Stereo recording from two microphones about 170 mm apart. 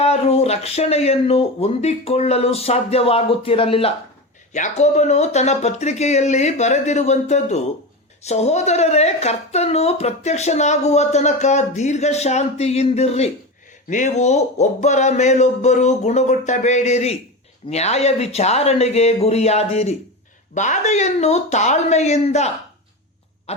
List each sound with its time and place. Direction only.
0.0 s speech: 40° left (ahead or behind)
4.5 s speech: 45° left (ahead or behind)
23.5 s a sound: 40° left (ahead or behind)